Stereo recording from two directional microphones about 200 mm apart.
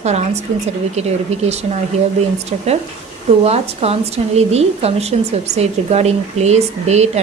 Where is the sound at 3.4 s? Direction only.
30° right (ahead or behind).